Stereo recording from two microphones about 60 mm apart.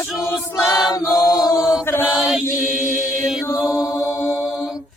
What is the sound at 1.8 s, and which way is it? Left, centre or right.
Mantra, left.